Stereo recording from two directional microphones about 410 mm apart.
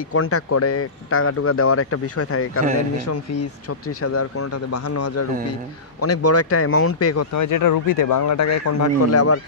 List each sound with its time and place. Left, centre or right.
0.1 s speech: left
4.0 s speech: left